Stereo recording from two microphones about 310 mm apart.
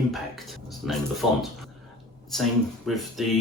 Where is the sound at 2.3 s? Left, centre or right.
Centre.